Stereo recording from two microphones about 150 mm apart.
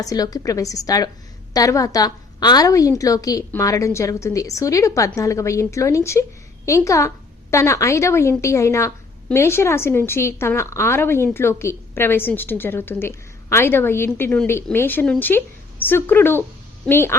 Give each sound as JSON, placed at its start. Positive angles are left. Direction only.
{"t": 0.0, "sound": "a woman's voice", "side_deg": 25}